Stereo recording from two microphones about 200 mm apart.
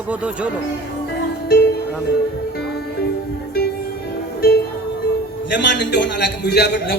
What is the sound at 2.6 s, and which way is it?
Music, 55° left (ahead or behind).